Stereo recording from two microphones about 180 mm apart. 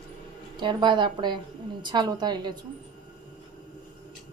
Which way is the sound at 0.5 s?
25° right (ahead or behind).